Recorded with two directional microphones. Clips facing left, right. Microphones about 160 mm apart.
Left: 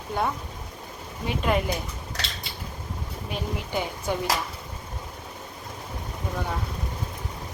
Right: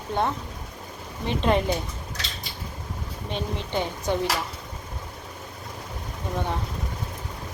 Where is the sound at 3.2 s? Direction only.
10° left (ahead or behind).